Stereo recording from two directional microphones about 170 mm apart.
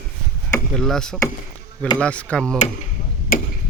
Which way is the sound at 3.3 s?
60° left (ahead or behind).